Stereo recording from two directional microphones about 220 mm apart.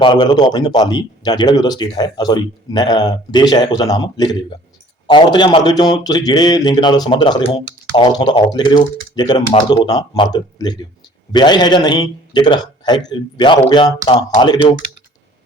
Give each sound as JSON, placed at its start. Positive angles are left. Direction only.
{"t": 0.0, "sound": "speech", "side_deg": 20}